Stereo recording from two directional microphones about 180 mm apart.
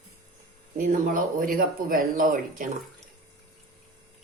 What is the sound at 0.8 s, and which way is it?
Speech, 50° right (ahead or behind).